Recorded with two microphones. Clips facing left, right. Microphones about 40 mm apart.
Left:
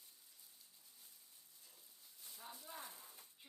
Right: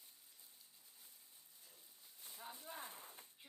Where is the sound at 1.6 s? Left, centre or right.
Centre; by 3.2 s right.